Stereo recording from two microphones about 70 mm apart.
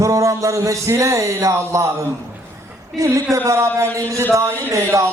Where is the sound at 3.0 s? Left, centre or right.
Right.